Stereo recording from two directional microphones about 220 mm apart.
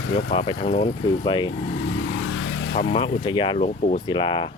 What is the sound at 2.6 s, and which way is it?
Vehicle, 45° left (ahead or behind).